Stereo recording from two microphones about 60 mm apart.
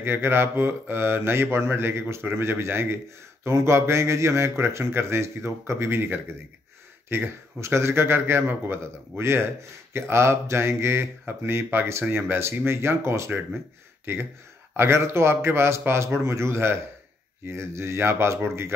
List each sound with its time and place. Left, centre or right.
0.0 s speech: right